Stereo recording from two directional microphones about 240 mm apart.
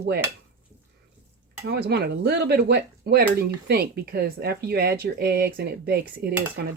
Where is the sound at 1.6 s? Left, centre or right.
Right.